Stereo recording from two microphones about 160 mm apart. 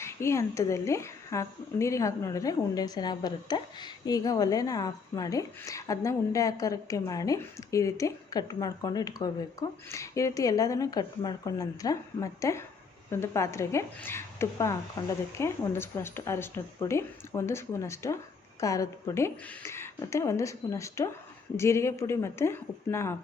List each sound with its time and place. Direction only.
0.0 s a woman's voice: 15° left (ahead or behind)